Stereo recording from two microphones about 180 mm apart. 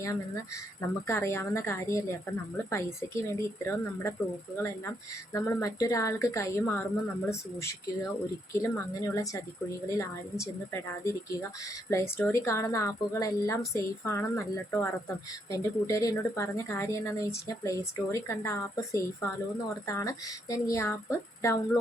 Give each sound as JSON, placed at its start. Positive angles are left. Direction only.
{"t": 0.8, "sound": "a woman's voice", "side_deg": 15}
{"t": 11.9, "sound": "a woman's voice", "side_deg": 15}